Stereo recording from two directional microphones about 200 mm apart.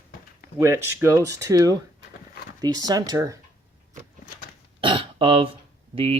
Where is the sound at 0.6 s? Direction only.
15° right (ahead or behind).